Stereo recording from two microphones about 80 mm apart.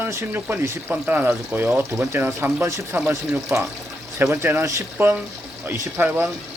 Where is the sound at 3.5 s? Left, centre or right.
Right.